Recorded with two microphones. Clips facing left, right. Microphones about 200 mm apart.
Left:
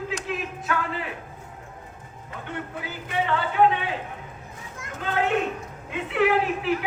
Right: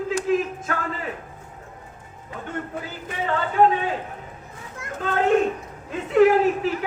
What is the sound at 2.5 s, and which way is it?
A man's voice, 40° right (ahead or behind).